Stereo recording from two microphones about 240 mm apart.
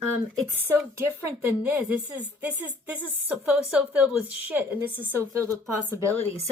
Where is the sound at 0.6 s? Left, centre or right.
Centre.